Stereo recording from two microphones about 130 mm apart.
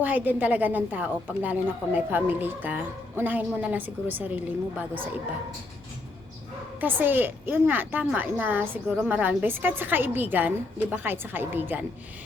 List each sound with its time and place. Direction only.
0.0 s a woman's voice: 15° right (ahead or behind)
6.7 s a woman's voice: 15° right (ahead or behind)